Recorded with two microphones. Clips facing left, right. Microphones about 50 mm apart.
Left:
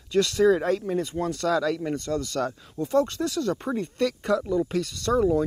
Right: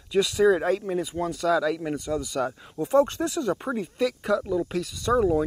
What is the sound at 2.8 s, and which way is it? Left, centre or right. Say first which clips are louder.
Speech: right 2 dB; right.